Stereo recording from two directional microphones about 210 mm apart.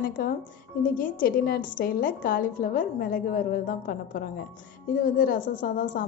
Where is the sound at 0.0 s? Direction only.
40° left (ahead or behind).